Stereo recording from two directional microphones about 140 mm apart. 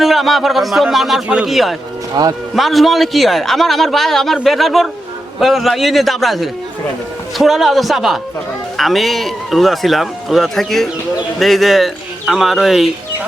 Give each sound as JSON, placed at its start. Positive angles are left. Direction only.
{"t": 0.0, "sound": "a man's voice", "side_deg": 0}
{"t": 2.2, "sound": "speech", "side_deg": -25}
{"t": 2.6, "sound": "a man's voice", "side_deg": 0}